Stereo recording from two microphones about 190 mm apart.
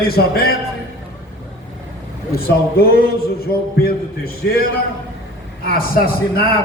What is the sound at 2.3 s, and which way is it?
Speech, 55° left (ahead or behind).